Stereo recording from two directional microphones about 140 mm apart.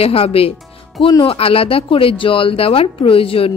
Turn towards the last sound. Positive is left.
turn(degrees=40)  # may be behind; listen again after turning